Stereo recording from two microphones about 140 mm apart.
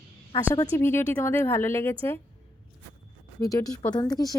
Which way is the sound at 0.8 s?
15° left (ahead or behind).